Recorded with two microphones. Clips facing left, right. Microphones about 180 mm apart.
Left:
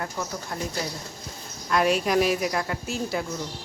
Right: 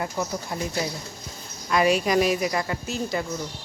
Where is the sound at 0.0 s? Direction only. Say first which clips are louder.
Right 3 dB; 10° right (ahead or behind).